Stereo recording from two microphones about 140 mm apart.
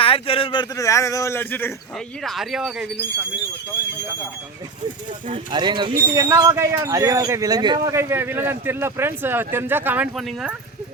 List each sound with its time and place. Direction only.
0.0 s speech: 40° left (ahead or behind)
0.8 s speech: 20° left (ahead or behind)
2.2 s speech: centre (ahead or behind)
5.3 s a man's voice: 35° right (ahead or behind)
7.9 s speech: 20° right (ahead or behind)
10.2 s speech: centre (ahead or behind)